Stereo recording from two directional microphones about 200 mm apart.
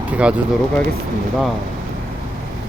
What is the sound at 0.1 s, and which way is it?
Speech, 5° right (ahead or behind).